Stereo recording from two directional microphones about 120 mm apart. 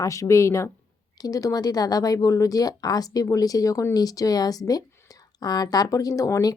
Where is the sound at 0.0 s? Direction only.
25° left (ahead or behind).